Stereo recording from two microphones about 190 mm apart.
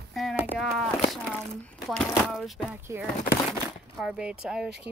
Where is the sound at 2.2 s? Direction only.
Centre (ahead or behind).